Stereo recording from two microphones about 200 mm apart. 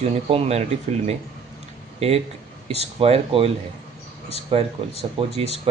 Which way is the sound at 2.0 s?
30° right (ahead or behind).